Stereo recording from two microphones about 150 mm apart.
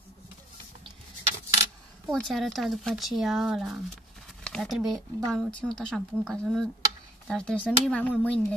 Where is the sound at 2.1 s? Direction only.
5° left (ahead or behind).